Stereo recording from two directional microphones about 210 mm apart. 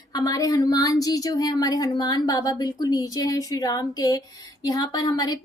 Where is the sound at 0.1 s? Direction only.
15° left (ahead or behind).